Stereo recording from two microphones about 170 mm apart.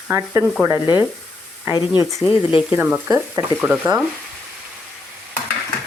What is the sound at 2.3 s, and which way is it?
Speech, 30° left (ahead or behind).